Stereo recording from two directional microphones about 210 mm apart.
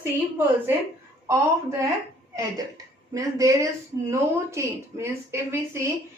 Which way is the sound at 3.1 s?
15° right (ahead or behind).